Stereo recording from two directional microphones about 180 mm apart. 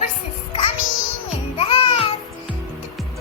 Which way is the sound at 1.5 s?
30° left (ahead or behind).